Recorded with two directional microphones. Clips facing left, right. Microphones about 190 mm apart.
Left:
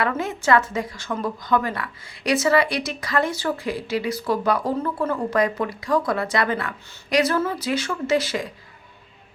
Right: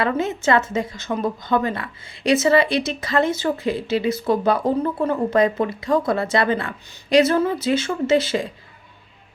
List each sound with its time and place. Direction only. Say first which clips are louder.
0.0 s speech: right 3 dB; 25° right (ahead or behind)